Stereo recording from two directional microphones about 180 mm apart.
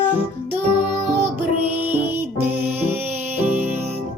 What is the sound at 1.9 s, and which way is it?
Music, 10° right (ahead or behind).